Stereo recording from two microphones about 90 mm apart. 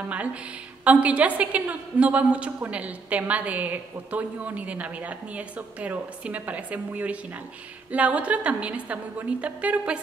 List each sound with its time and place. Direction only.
0.1 s a woman's voice: 15° right (ahead or behind)